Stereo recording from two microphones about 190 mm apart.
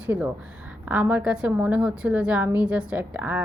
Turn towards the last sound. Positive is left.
turn(degrees=-10)  # may be behind; listen again after turning